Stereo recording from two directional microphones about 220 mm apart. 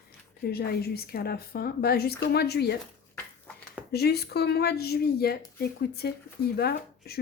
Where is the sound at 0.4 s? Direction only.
45° left (ahead or behind).